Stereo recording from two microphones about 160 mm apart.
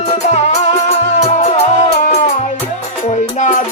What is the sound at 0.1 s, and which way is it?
Music, 45° left (ahead or behind).